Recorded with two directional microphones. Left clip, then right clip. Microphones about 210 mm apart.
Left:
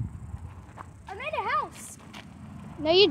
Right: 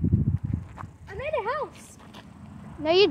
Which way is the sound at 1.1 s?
50° left (ahead or behind).